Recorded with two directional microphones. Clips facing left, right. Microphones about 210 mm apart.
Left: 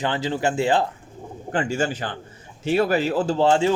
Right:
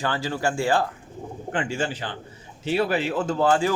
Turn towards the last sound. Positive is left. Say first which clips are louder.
# left 2 dB
turn(degrees=25)  # may be behind; listen again after turning